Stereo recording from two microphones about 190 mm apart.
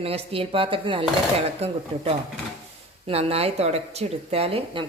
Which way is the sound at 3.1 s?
30° right (ahead or behind).